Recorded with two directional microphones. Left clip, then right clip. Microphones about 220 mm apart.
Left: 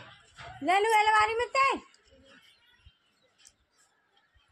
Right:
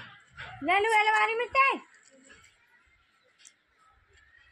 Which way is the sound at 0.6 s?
10° left (ahead or behind).